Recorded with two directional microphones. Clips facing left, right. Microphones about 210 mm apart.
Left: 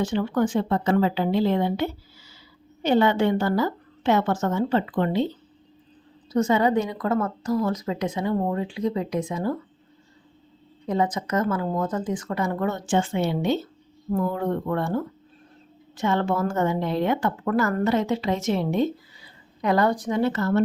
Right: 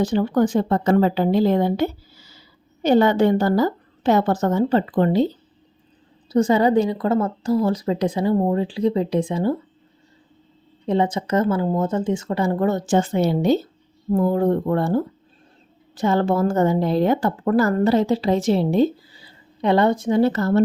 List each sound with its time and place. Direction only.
0.0 s speech: 35° right (ahead or behind)
6.3 s speech: 35° right (ahead or behind)
10.8 s a woman's voice: 30° right (ahead or behind)